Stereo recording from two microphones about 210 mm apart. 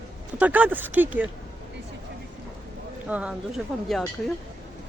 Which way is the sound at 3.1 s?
5° right (ahead or behind).